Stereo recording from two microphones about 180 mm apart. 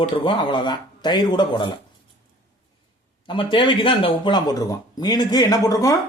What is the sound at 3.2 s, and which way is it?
A man's voice, 25° left (ahead or behind).